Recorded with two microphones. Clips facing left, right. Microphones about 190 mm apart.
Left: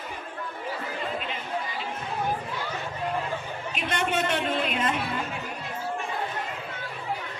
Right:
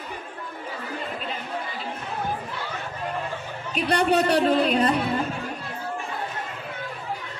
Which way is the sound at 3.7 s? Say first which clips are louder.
Right 7 dB; 35° right (ahead or behind).